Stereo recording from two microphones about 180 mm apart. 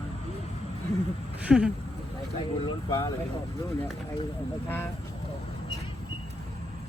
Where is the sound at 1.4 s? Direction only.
10° right (ahead or behind).